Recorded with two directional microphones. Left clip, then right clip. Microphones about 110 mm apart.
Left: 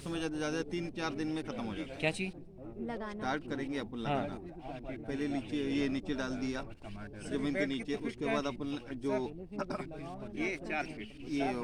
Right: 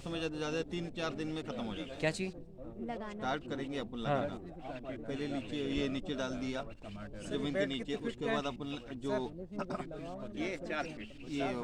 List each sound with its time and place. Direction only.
0.1 s speech: 15° left (ahead or behind)
2.0 s speech: 40° right (ahead or behind)
2.8 s speech: 10° left (ahead or behind)
5.0 s speech: 5° left (ahead or behind)
10.3 s speech: 5° right (ahead or behind)
11.3 s speech: 5° left (ahead or behind)